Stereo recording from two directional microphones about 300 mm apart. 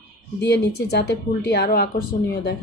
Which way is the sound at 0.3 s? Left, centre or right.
Left.